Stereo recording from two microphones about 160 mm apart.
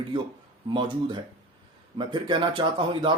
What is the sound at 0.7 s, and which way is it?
Speech, 30° right (ahead or behind).